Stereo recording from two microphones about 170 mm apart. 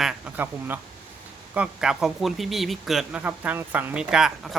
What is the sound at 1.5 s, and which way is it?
Speech, 5° right (ahead or behind).